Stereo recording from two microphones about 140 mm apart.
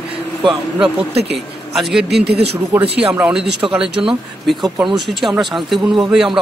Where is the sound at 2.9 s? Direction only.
10° right (ahead or behind).